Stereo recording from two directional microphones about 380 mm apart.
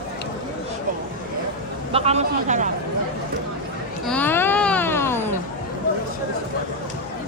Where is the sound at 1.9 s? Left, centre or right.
Centre.